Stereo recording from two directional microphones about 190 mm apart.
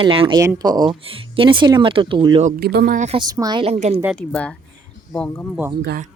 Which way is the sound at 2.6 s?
60° right (ahead or behind).